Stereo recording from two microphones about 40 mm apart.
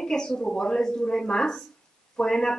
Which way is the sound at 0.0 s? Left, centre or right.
Centre.